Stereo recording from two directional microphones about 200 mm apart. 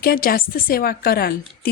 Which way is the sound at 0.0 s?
45° left (ahead or behind).